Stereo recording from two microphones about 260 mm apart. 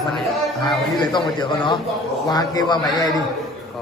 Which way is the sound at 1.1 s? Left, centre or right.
Centre.